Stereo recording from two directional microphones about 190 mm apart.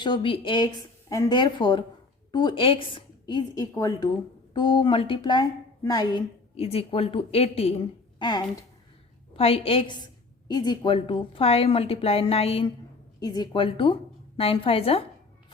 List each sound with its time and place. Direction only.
0.0 s a woman's voice: 25° left (ahead or behind)